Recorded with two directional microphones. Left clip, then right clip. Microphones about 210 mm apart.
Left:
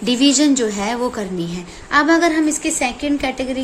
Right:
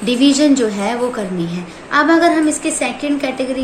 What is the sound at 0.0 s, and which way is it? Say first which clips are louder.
A woman's voice: right 2 dB; 40° left (ahead or behind).